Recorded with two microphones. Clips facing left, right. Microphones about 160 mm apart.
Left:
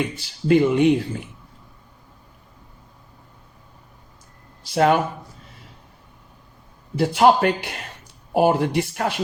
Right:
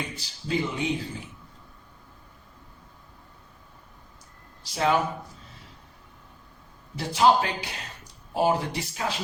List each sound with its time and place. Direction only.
0.4 s speech: 65° left (ahead or behind)
4.7 s speech: 60° left (ahead or behind)
6.9 s speech: 60° left (ahead or behind)